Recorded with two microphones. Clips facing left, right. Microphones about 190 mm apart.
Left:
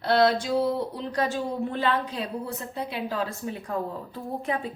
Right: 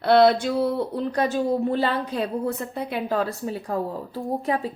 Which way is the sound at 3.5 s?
35° right (ahead or behind).